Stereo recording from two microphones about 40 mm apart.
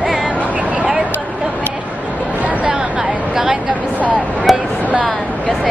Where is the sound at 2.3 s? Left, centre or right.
Right.